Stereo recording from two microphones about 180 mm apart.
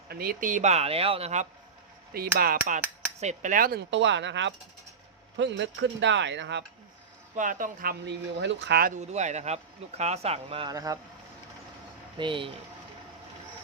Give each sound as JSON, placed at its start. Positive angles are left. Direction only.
{"t": 0.1, "sound": "speech", "side_deg": -55}
{"t": 2.1, "sound": "speech", "side_deg": -55}
{"t": 3.9, "sound": "speech", "side_deg": -85}
{"t": 7.3, "sound": "speech", "side_deg": -45}
{"t": 8.0, "sound": "speech", "side_deg": -75}
{"t": 9.0, "sound": "speech", "side_deg": -40}
{"t": 12.1, "sound": "speech", "side_deg": -25}